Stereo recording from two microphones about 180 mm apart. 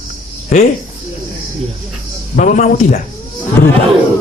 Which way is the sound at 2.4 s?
45° left (ahead or behind).